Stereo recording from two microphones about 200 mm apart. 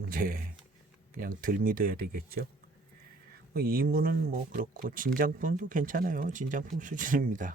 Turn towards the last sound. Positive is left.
turn(degrees=-40)  # may be behind; listen again after turning